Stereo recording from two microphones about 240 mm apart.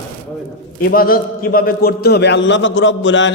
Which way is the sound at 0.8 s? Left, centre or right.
Left.